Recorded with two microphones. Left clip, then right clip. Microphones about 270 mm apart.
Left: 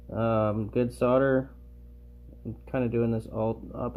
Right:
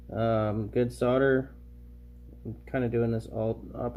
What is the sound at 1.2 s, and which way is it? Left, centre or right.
Speech, centre.